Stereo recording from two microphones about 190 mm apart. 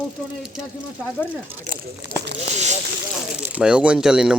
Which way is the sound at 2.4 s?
35° right (ahead or behind).